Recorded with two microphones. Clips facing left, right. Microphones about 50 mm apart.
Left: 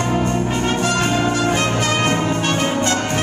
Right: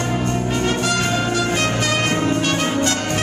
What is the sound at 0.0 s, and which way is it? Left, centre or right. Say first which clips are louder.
Music: left 2 dB; centre.